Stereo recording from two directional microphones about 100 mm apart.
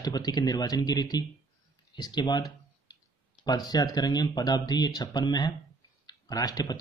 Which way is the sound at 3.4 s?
40° left (ahead or behind).